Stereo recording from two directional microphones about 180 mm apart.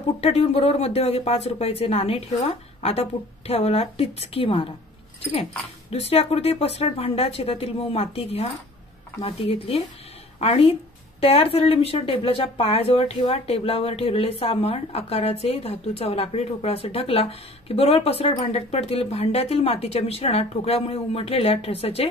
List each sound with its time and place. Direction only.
0.2 s a woman's voice: 35° left (ahead or behind)